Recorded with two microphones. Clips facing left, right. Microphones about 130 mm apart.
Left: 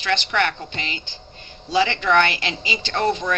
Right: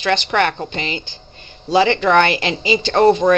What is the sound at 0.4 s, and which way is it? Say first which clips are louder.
Speech: right 5 dB; 40° right (ahead or behind).